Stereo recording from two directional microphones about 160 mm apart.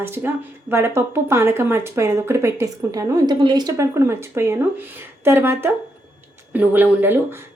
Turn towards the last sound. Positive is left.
turn(degrees=-15)  # may be behind; listen again after turning